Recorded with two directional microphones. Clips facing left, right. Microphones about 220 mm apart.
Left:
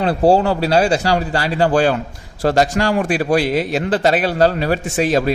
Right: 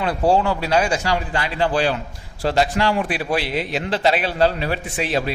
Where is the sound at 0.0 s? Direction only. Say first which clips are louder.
Left 5 dB; 35° left (ahead or behind).